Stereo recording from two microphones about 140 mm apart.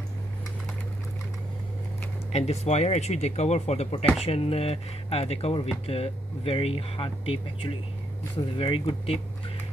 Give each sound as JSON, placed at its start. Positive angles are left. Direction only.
{"t": 2.3, "sound": "speech", "side_deg": 50}